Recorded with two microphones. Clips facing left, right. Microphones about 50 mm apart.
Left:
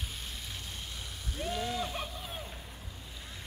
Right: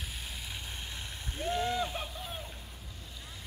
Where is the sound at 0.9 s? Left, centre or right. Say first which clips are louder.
Even; right.